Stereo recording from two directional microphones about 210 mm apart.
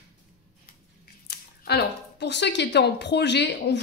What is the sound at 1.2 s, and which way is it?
Speech, 50° left (ahead or behind).